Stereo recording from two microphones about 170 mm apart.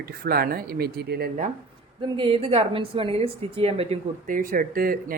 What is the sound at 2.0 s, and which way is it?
A woman's voice, 30° right (ahead or behind).